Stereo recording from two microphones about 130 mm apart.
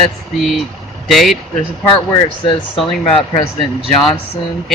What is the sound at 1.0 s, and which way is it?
Speech, centre (ahead or behind).